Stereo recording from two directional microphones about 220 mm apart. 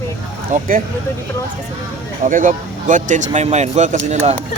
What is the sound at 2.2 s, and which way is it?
Speech, 35° right (ahead or behind).